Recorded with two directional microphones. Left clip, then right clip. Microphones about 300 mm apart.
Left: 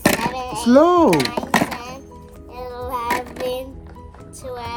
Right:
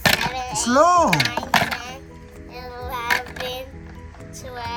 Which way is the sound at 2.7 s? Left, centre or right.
Right.